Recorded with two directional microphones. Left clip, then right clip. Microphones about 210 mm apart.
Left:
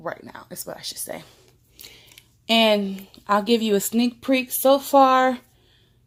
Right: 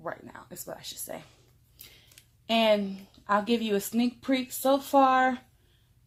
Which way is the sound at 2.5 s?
35° left (ahead or behind).